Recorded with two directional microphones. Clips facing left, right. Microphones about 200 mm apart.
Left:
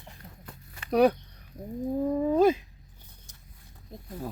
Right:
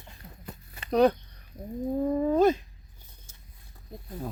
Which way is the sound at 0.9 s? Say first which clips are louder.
Even; 10° left (ahead or behind).